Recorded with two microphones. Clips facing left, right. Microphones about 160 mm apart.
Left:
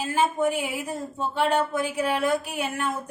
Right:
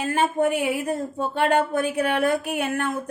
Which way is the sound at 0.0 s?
60° right (ahead or behind).